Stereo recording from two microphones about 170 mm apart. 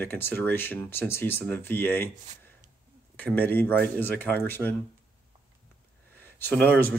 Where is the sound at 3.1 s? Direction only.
10° left (ahead or behind).